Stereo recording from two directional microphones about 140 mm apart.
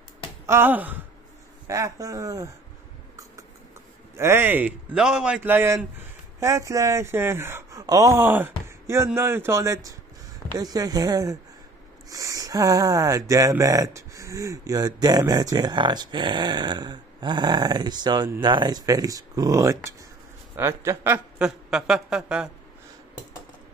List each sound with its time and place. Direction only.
0.5 s a man's voice: 15° right (ahead or behind)
1.7 s speech: 25° right (ahead or behind)
4.2 s a man's voice: 15° right (ahead or behind)
21.5 s a sound: 5° right (ahead or behind)